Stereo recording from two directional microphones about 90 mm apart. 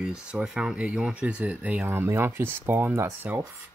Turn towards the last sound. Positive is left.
turn(degrees=-25)  # may be behind; listen again after turning